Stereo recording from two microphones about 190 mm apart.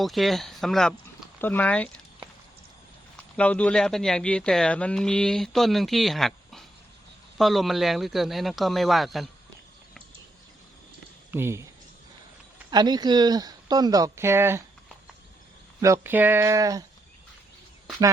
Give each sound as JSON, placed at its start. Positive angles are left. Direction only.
{"t": 0.0, "sound": "speech", "side_deg": 0}
{"t": 3.3, "sound": "speech", "side_deg": 5}
{"t": 11.3, "sound": "speech", "side_deg": -10}
{"t": 12.7, "sound": "speech", "side_deg": -20}
{"t": 15.8, "sound": "speech", "side_deg": -15}